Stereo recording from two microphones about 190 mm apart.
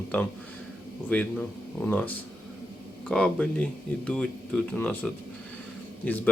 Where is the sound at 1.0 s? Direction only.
10° left (ahead or behind).